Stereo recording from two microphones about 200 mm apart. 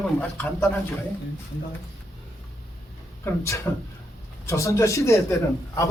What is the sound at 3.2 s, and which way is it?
A man's voice, 15° left (ahead or behind).